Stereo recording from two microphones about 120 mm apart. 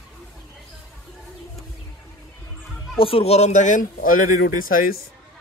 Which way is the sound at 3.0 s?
50° left (ahead or behind).